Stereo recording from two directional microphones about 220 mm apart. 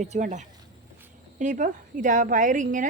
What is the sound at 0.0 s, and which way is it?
A woman's voice, 35° right (ahead or behind).